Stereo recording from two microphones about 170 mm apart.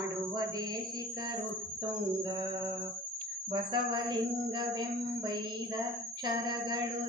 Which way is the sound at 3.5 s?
25° right (ahead or behind).